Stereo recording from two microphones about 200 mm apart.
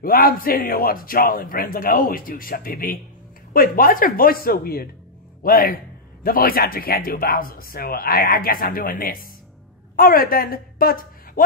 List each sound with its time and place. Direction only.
0.0 s a woman's voice: 45° left (ahead or behind)